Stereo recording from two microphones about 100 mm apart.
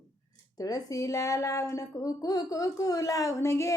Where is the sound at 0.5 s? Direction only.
35° left (ahead or behind).